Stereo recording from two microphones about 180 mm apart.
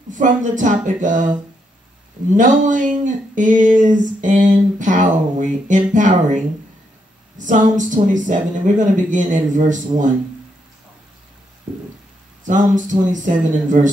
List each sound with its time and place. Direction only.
0.1 s speech: 45° right (ahead or behind)
2.3 s speech: 45° right (ahead or behind)
12.4 s speech: 45° right (ahead or behind)